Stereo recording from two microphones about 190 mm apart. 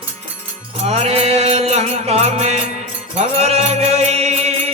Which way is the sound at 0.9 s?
35° right (ahead or behind).